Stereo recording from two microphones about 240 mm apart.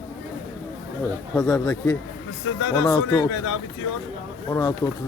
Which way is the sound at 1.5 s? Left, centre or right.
Centre.